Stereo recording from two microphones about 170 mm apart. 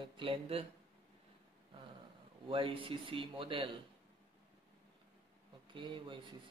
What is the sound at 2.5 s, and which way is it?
Speech, 30° right (ahead or behind).